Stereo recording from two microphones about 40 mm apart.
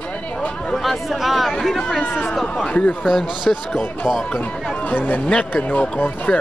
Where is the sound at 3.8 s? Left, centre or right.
Centre.